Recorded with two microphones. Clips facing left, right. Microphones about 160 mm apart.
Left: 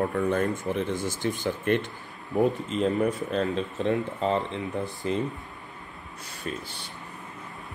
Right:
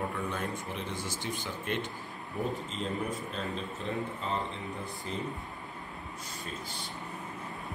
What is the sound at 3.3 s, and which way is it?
Speech, 80° left.